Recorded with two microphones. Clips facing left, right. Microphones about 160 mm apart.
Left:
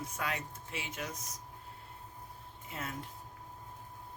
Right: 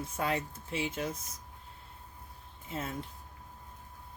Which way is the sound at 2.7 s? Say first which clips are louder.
Right 4 dB; 25° right (ahead or behind).